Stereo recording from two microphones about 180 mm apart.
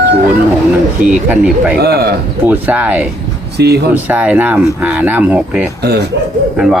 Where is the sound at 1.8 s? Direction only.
65° right (ahead or behind).